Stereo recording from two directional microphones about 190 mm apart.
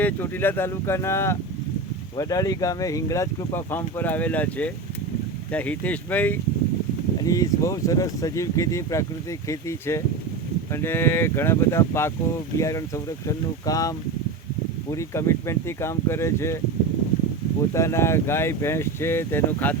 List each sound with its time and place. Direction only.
0.0 s speech: 10° left (ahead or behind)
17.7 s speech: 15° left (ahead or behind)